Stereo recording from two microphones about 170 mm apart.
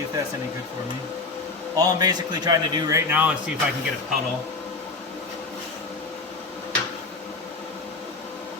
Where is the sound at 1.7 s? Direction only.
25° right (ahead or behind).